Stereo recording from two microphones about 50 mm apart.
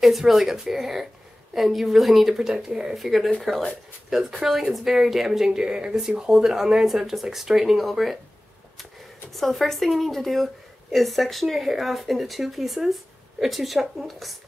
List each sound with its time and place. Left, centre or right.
0.0 s speech: centre
2.5 s speech: centre
2.9 s speech: centre
9.3 s speech: centre